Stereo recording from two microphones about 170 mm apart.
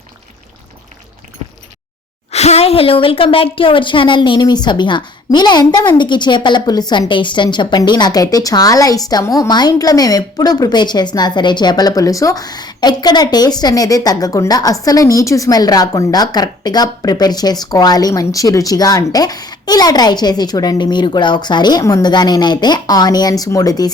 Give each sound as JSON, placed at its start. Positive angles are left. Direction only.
{"t": 2.3, "sound": "a woman's voice", "side_deg": 40}